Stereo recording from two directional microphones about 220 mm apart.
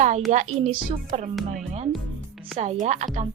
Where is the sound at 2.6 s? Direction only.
30° right (ahead or behind).